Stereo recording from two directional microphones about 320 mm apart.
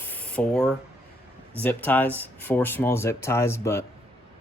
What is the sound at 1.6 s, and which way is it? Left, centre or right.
Speech, centre.